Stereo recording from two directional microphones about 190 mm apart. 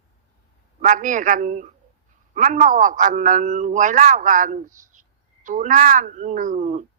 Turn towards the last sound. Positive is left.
turn(degrees=-40)  # may be behind; listen again after turning